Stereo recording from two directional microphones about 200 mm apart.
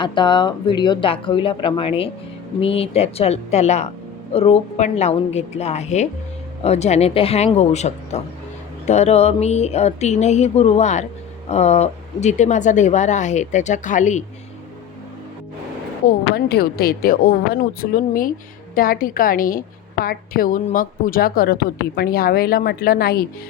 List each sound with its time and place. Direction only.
0.0 s speech: 25° left (ahead or behind)
16.0 s a woman's voice: 50° left (ahead or behind)